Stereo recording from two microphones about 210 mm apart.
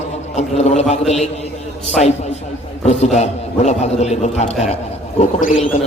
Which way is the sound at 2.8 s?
30° left (ahead or behind).